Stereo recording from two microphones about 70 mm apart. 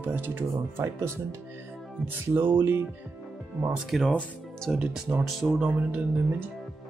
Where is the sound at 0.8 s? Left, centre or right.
Right.